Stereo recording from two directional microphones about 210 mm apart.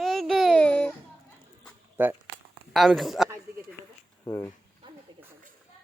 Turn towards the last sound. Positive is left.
turn(degrees=15)  # may be behind; listen again after turning